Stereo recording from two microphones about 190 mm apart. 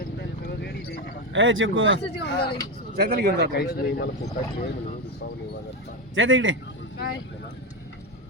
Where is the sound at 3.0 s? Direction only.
55° right (ahead or behind).